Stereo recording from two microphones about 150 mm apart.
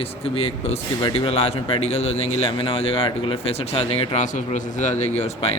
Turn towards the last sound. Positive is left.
turn(degrees=45)  # may be behind; listen again after turning